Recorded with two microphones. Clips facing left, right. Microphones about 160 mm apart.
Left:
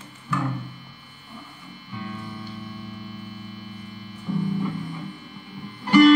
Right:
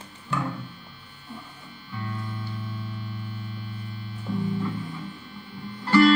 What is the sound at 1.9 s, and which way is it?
Music, 15° left (ahead or behind).